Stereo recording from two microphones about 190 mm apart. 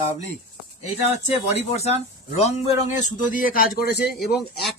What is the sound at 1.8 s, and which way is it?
Speech, 35° left (ahead or behind).